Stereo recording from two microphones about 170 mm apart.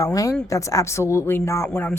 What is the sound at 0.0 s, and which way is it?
Speech, 20° left (ahead or behind).